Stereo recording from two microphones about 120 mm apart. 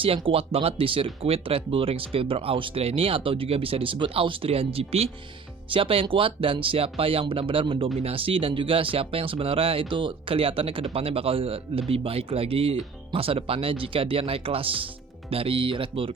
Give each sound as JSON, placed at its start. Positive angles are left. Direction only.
{"t": 0.0, "sound": "speech", "side_deg": -50}